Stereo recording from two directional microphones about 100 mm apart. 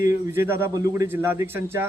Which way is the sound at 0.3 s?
25° right (ahead or behind).